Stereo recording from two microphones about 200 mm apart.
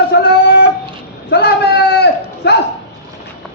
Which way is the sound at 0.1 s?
55° left (ahead or behind).